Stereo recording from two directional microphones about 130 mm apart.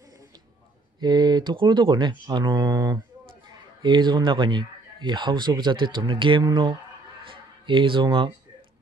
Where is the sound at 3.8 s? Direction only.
35° right (ahead or behind).